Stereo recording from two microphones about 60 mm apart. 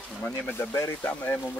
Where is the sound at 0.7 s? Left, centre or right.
Left.